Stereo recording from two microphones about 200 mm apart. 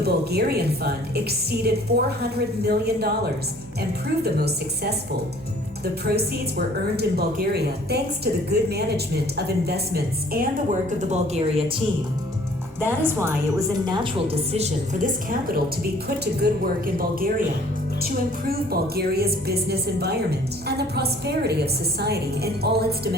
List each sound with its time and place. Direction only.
0.0 s a woman's voice: 50° right (ahead or behind)
4.2 s a woman's voice: 50° right (ahead or behind)
11.1 s speech: 30° right (ahead or behind)
12.8 s a woman's voice: 10° right (ahead or behind)
14.5 s a woman's voice: 35° right (ahead or behind); by 23.0 s 50° right (ahead or behind)